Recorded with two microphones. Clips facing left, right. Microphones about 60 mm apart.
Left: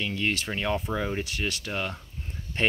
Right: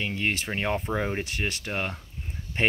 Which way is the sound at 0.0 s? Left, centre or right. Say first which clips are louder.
Even; right.